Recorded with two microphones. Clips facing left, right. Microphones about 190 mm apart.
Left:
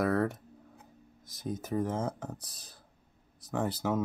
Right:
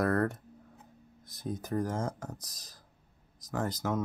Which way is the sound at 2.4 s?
30° left (ahead or behind).